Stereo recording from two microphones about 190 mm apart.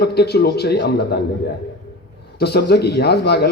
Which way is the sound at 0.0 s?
60° left (ahead or behind).